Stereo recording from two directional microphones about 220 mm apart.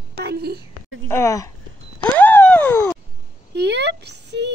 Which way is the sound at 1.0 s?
10° left (ahead or behind).